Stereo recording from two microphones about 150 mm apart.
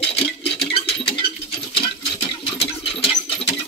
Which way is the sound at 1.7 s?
35° left (ahead or behind).